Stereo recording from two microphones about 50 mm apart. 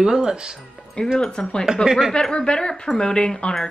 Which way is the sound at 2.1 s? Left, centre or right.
Centre.